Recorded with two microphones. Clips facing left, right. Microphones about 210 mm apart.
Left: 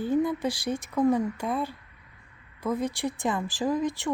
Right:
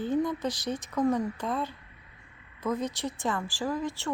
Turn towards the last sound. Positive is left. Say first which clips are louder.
# left 4 dB
turn(degrees=15)  # may be behind; listen again after turning